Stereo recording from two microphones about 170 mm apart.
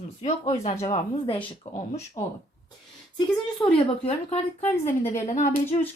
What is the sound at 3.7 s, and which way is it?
Speech, 35° left (ahead or behind).